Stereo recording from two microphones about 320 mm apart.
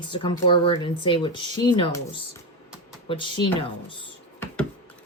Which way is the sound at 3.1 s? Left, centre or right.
Centre.